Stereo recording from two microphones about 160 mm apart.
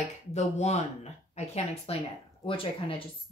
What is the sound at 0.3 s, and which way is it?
A woman's voice, 45° left (ahead or behind).